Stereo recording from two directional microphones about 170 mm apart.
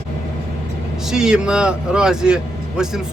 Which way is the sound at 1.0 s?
5° right (ahead or behind).